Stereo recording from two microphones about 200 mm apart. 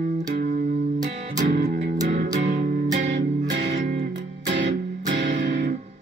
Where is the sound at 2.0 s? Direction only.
35° right (ahead or behind).